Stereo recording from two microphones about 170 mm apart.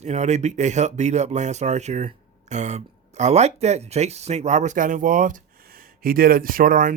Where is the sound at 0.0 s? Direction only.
40° right (ahead or behind).